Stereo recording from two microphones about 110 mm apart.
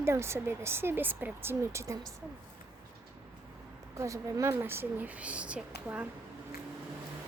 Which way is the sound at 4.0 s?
30° right (ahead or behind).